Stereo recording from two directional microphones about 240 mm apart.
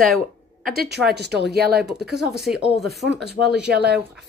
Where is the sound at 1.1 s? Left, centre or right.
Right.